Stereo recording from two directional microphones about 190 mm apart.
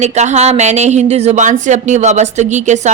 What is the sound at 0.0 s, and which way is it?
Speech, 35° right (ahead or behind).